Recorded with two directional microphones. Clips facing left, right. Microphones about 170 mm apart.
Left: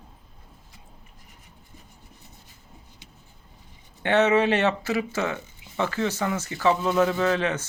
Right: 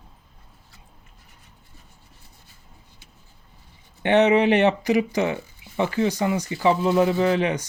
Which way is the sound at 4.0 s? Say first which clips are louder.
Right 3 dB; 15° right (ahead or behind).